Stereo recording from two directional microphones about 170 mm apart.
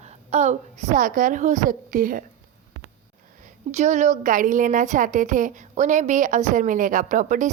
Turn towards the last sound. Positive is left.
turn(degrees=-50)  # may be behind; listen again after turning